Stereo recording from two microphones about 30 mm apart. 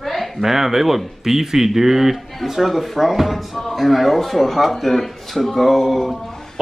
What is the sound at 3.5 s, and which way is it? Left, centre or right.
Speech, centre.